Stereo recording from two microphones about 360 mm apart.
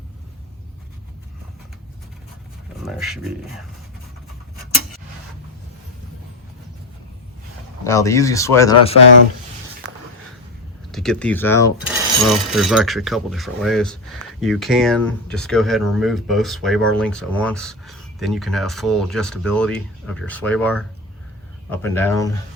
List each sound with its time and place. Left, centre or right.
2.8 s speech: centre
7.9 s speech: centre
10.9 s speech: centre